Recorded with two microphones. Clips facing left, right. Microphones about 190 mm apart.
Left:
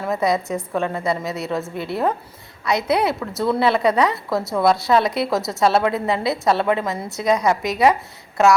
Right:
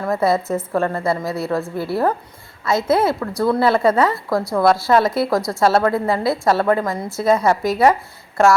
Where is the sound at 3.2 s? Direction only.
5° left (ahead or behind).